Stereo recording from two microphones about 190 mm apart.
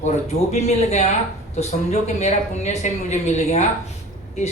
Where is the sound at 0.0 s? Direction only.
35° left (ahead or behind).